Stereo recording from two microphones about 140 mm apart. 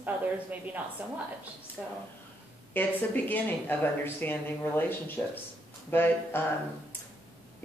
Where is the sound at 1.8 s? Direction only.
Centre (ahead or behind).